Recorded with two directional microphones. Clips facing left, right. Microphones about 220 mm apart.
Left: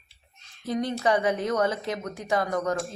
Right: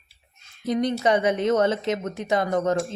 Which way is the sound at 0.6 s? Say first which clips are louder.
Right 4 dB; 20° right (ahead or behind).